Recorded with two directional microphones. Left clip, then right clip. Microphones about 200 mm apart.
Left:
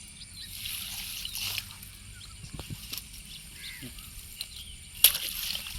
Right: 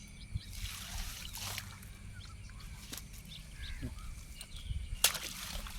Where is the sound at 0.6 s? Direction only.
30° right (ahead or behind).